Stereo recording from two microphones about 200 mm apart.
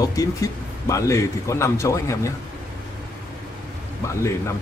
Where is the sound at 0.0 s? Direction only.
15° left (ahead or behind).